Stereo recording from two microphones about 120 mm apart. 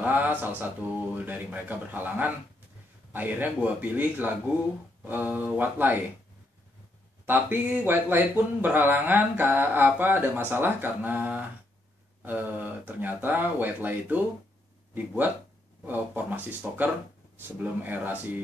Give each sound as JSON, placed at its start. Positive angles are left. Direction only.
{"t": 0.0, "sound": "a sound", "side_deg": -15}
{"t": 0.8, "sound": "speech", "side_deg": -15}
{"t": 7.2, "sound": "speech", "side_deg": -15}
{"t": 15.8, "sound": "speech", "side_deg": -15}